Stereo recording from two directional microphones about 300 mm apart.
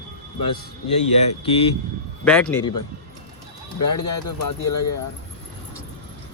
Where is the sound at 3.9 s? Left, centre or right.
Left.